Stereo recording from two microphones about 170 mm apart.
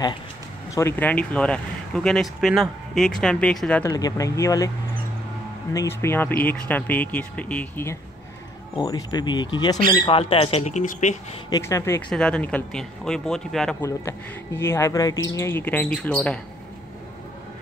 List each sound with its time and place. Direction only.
0.7 s speech: 15° left (ahead or behind)
3.8 s speech: 20° left (ahead or behind)
5.7 s speech: 15° left (ahead or behind)
8.7 s speech: 25° left (ahead or behind); by 11.1 s 45° left (ahead or behind)
11.5 s speech: 15° left (ahead or behind)
12.1 s speech: 5° left (ahead or behind)
14.6 s speech: 15° left (ahead or behind)